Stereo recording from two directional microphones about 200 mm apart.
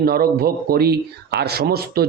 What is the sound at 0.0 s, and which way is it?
Speech, 50° right (ahead or behind).